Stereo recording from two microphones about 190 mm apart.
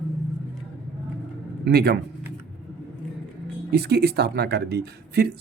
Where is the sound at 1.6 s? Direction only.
60° right (ahead or behind).